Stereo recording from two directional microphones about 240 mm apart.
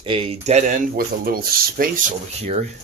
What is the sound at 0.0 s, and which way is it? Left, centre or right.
Speech, right.